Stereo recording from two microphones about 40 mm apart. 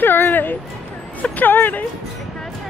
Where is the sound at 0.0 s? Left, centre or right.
Left.